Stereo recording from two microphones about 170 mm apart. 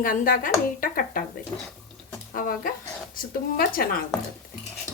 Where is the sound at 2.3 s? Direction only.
55° left (ahead or behind).